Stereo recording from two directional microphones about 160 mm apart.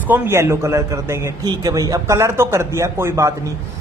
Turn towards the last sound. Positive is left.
turn(degrees=-20)  # may be behind; listen again after turning